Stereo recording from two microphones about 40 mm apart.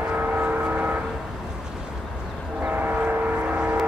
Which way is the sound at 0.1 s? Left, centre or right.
Right.